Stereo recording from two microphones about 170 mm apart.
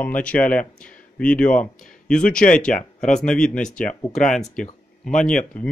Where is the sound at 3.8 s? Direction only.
50° left (ahead or behind).